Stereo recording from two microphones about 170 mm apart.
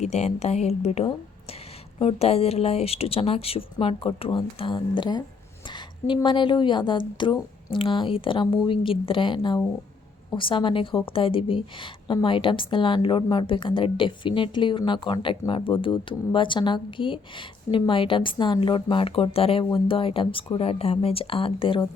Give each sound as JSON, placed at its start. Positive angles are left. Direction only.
{"t": 0.0, "sound": "a woman's voice", "side_deg": 40}